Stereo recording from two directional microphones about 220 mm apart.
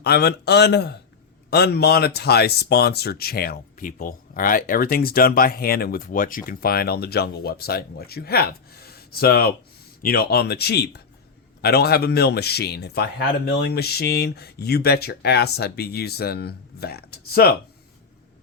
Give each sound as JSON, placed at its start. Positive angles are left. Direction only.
{"t": 0.0, "sound": "speech", "side_deg": 45}